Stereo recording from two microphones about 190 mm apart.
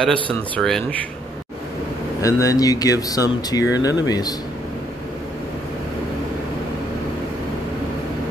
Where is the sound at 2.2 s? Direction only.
15° left (ahead or behind).